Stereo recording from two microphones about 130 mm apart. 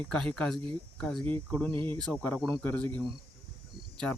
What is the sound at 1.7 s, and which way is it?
Speech, 40° right (ahead or behind).